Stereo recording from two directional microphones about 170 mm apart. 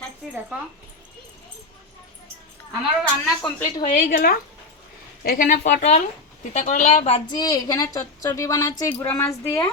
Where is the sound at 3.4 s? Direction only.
25° left (ahead or behind).